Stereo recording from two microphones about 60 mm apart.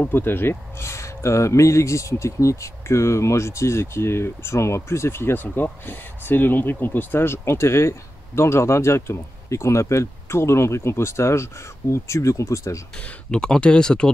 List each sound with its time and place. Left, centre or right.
0.0 s speech: left
13.3 s speech: centre